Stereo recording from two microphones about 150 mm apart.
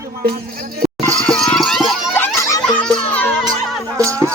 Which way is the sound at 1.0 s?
10° left (ahead or behind).